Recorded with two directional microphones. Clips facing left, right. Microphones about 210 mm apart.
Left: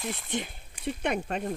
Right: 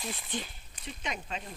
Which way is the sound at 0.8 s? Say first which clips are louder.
Left 10 dB; 60° left (ahead or behind).